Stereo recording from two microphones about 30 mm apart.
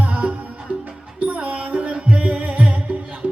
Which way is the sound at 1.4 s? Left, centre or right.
Right.